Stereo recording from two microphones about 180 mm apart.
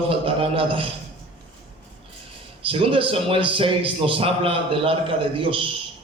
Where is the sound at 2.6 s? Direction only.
30° right (ahead or behind).